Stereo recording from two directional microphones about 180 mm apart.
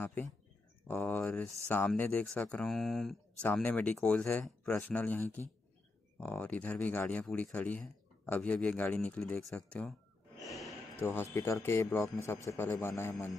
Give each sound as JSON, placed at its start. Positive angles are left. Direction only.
{"t": 0.8, "sound": "speech", "side_deg": 10}
{"t": 10.4, "sound": "a sound", "side_deg": 0}
{"t": 11.0, "sound": "a man's voice", "side_deg": 10}